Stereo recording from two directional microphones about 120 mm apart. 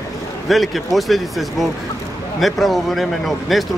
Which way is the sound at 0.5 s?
Centre (ahead or behind).